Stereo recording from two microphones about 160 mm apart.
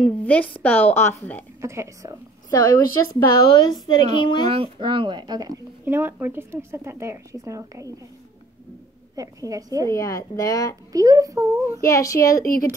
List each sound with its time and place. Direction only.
0.0 s a woman's voice: 10° left (ahead or behind)
1.6 s a woman's voice: 15° right (ahead or behind)
2.5 s speech: 25° left (ahead or behind)
4.5 s speech: 35° right (ahead or behind)
9.1 s speech: 20° right (ahead or behind)
9.8 s speech: 20° left (ahead or behind)
10.9 s speech: 20° right (ahead or behind)
11.8 s speech: 20° left (ahead or behind)